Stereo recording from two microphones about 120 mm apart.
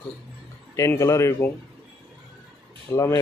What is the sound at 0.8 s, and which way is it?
Speech, 25° left (ahead or behind).